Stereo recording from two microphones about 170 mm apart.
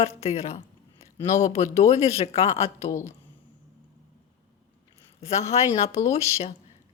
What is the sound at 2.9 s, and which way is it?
Speech, 15° left (ahead or behind).